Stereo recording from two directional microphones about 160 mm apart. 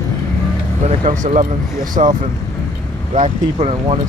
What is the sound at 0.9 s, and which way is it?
Speech, 50° right (ahead or behind).